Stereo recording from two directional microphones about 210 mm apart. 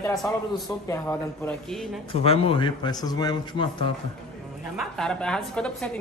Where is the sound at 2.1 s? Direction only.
25° left (ahead or behind).